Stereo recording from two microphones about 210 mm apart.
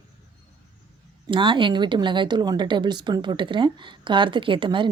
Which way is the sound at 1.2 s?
20° right (ahead or behind).